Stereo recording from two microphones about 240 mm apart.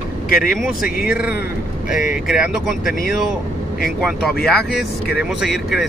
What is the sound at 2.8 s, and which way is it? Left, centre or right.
Speech, left.